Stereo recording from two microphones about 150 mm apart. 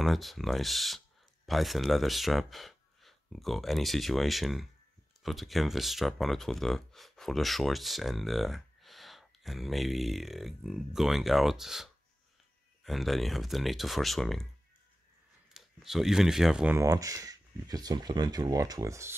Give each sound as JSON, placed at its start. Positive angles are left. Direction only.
{"t": 0.0, "sound": "speech", "side_deg": 0}
{"t": 15.5, "sound": "speech", "side_deg": -5}
{"t": 16.7, "sound": "speech", "side_deg": -20}